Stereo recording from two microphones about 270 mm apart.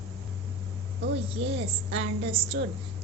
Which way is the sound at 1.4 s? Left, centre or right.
Right.